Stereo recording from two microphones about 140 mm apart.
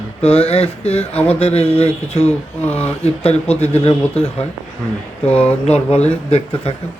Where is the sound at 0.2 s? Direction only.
45° left (ahead or behind).